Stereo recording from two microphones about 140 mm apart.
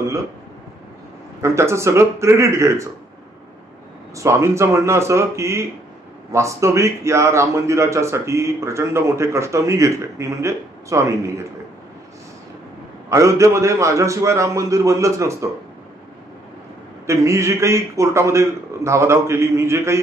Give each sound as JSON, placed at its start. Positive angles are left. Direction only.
{"t": 1.4, "sound": "speech", "side_deg": -20}
{"t": 4.1, "sound": "speech", "side_deg": -20}
{"t": 13.1, "sound": "speech", "side_deg": -20}
{"t": 17.0, "sound": "speech", "side_deg": -20}